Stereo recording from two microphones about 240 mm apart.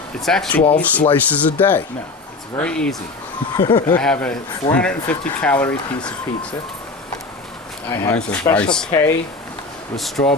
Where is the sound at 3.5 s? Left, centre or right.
Left.